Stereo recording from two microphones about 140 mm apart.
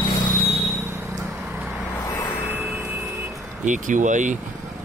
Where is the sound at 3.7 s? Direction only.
65° right (ahead or behind).